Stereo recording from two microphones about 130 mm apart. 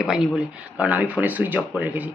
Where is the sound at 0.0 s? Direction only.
5° right (ahead or behind).